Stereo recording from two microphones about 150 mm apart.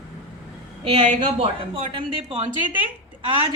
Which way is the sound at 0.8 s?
35° right (ahead or behind).